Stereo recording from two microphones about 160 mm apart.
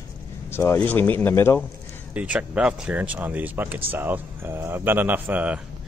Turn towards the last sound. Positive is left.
turn(degrees=-10)  # may be behind; listen again after turning